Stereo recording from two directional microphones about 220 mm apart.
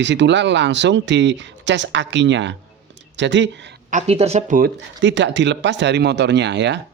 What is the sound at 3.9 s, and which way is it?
Speech, 30° right (ahead or behind).